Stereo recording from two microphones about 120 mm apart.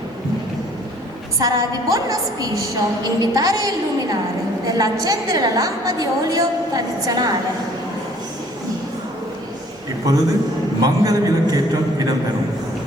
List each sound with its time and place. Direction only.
1.4 s a woman's voice: 30° right (ahead or behind)
10.1 s a man's voice: 30° right (ahead or behind)